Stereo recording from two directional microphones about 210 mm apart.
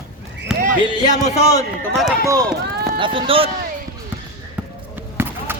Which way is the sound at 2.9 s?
25° right (ahead or behind).